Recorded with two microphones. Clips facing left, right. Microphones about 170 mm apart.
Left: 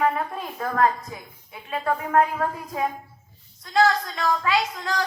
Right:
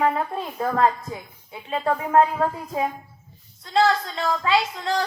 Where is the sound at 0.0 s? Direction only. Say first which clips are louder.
Right 1 dB; 25° right (ahead or behind).